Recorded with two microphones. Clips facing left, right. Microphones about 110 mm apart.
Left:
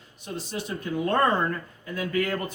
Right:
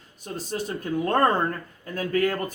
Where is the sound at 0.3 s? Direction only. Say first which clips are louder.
Right 3 dB; 45° right (ahead or behind).